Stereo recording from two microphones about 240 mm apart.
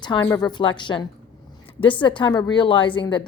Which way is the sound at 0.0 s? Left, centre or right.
Centre.